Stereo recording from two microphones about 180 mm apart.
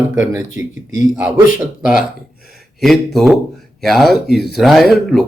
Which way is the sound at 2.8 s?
Centre (ahead or behind).